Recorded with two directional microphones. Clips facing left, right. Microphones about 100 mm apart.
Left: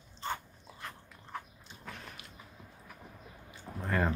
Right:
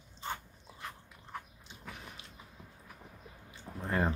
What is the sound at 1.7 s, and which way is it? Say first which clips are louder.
Horse: left 1 dB; 15° right (ahead or behind).